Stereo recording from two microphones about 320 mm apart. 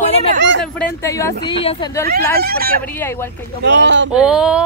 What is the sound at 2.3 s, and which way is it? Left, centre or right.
Speech, right.